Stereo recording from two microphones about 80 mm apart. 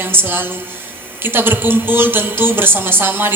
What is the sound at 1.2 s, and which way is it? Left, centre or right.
A man's voice, right.